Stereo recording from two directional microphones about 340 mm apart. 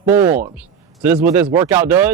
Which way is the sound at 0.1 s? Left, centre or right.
Centre.